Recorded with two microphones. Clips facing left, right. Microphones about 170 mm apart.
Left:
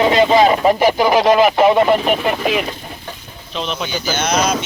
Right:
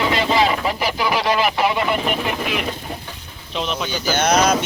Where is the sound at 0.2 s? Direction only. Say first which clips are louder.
Left 7 dB; 45° left (ahead or behind).